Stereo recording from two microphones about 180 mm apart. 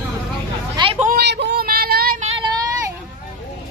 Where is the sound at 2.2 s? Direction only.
35° right (ahead or behind).